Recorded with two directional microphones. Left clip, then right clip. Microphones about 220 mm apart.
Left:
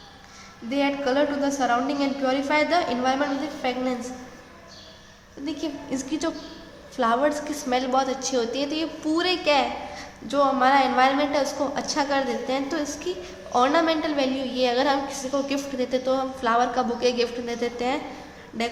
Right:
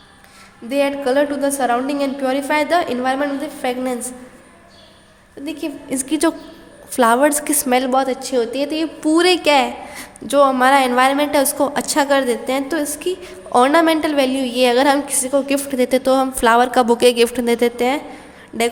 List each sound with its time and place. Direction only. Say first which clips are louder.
0.7 s a woman's voice: right 7 dB; 40° right (ahead or behind)
5.5 s a woman's voice: right 5 dB; 35° right (ahead or behind)